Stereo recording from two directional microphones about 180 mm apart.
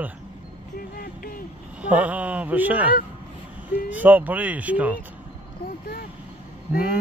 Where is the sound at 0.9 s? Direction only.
60° left (ahead or behind).